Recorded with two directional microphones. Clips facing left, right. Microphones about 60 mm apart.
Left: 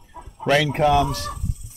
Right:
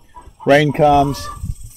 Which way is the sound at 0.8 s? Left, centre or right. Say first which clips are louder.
Right 6 dB; centre.